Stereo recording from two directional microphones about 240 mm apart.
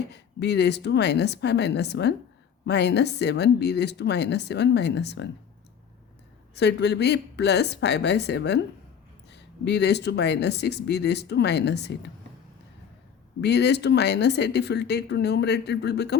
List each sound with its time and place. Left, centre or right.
0.1 s speech: left
6.5 s speech: left
13.4 s speech: left